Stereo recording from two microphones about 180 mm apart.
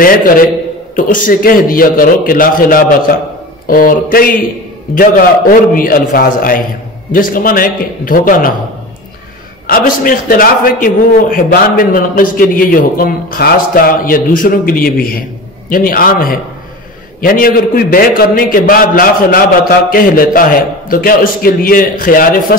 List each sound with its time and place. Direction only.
0.0 s a man's voice: 50° left (ahead or behind)
5.5 s a man's voice: 50° left (ahead or behind)
9.7 s a man's voice: 50° left (ahead or behind)